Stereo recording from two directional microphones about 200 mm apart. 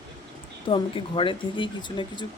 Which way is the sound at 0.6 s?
25° left (ahead or behind).